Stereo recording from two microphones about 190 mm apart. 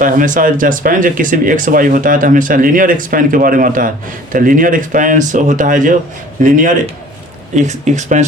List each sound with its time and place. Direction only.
0.0 s speech: 45° right (ahead or behind)
7.5 s speech: 40° right (ahead or behind)